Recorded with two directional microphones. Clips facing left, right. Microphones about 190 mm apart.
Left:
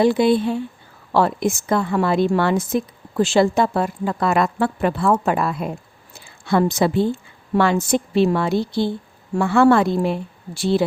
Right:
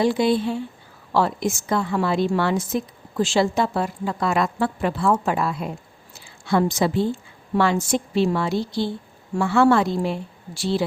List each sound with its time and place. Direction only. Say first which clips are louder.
0.0 s a woman's voice: left 4 dB; 55° left (ahead or behind)